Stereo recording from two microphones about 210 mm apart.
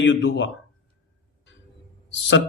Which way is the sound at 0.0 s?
55° left (ahead or behind).